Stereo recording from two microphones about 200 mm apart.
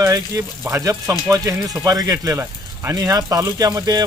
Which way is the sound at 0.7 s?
15° right (ahead or behind).